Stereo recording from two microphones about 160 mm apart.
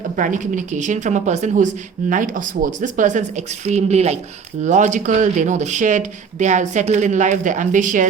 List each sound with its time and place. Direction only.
0.2 s speech: 55° right (ahead or behind)